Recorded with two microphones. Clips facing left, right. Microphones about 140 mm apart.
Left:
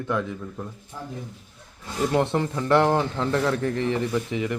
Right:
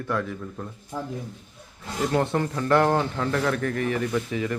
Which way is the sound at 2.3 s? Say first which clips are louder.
Left 1 dB; 20° left (ahead or behind).